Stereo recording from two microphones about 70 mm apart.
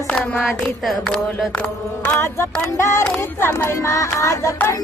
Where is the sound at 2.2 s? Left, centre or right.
Left.